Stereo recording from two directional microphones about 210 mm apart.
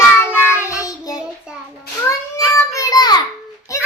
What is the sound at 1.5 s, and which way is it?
Speech, 5° right (ahead or behind).